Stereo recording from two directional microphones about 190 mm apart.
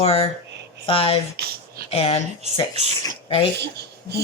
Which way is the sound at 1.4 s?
60° right (ahead or behind).